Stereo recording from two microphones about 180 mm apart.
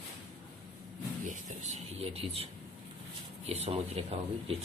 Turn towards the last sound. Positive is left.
turn(degrees=-35)  # may be behind; listen again after turning